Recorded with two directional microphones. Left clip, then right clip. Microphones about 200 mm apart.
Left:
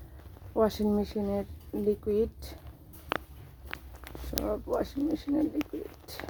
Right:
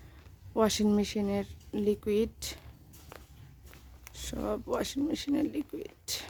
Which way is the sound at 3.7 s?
60° left (ahead or behind).